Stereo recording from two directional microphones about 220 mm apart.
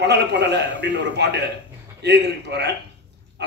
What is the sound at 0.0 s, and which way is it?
A man's voice, 50° right (ahead or behind).